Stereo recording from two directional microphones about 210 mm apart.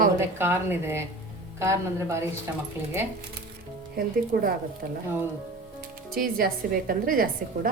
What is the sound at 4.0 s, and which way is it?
Speech, 45° right (ahead or behind).